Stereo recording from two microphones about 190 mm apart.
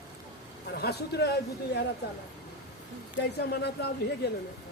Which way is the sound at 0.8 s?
60° left (ahead or behind).